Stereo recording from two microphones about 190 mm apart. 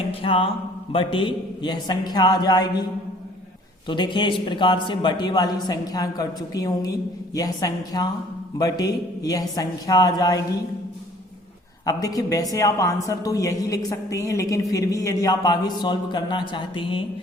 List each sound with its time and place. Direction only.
0.1 s speech: 30° left (ahead or behind)
3.8 s speech: 25° left (ahead or behind)
11.9 s a woman's voice: 20° left (ahead or behind)